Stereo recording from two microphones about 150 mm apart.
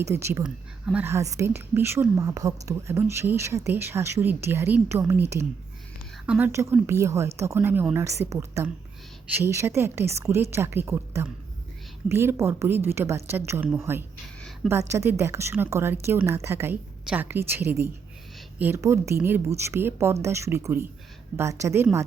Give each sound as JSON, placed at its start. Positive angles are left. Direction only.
{"t": 0.0, "sound": "a woman's voice", "side_deg": -15}
{"t": 6.2, "sound": "a woman's voice", "side_deg": -10}